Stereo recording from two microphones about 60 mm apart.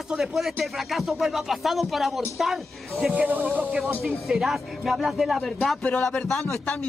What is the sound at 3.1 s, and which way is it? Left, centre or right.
Speech, right.